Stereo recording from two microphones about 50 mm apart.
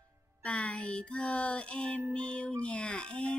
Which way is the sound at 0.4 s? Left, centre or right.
Left.